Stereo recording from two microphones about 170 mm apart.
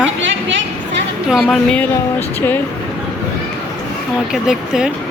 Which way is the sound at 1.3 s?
Centre (ahead or behind).